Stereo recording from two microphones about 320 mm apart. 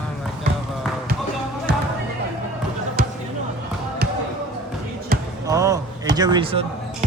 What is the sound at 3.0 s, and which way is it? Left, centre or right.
Music, right.